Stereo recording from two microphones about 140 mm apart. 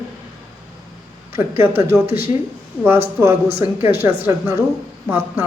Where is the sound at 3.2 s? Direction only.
20° right (ahead or behind).